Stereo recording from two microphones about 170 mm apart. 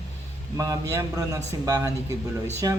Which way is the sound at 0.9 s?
20° right (ahead or behind).